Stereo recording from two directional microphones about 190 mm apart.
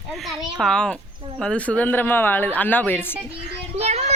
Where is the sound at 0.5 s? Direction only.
5° left (ahead or behind).